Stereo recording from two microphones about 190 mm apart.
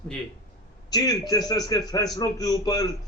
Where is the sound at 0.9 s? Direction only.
20° left (ahead or behind).